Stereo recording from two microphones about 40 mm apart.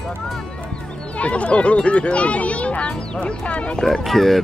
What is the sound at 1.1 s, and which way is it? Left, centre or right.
Speech, left.